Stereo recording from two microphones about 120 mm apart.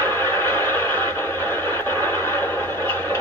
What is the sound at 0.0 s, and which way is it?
Radio, 20° left (ahead or behind).